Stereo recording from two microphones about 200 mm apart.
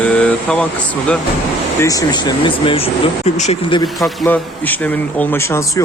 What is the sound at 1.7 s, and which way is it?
Speech, 15° left (ahead or behind).